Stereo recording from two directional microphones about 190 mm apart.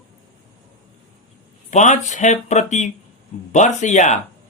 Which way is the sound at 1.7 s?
40° left (ahead or behind).